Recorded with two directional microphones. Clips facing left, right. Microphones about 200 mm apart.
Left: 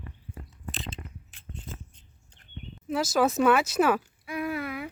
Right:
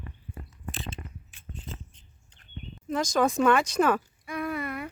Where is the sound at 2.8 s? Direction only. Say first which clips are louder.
Even; 5° left (ahead or behind).